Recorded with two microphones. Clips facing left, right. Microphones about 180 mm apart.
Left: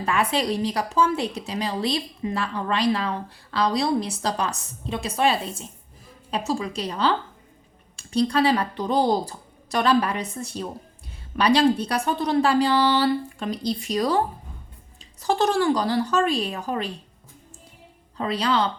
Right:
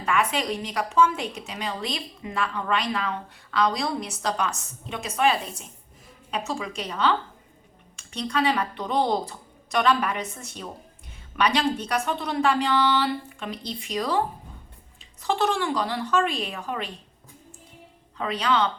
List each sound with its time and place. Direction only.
0.0 s a woman's voice: 30° left (ahead or behind)
15.2 s a woman's voice: 40° left (ahead or behind)
18.2 s a woman's voice: 35° left (ahead or behind)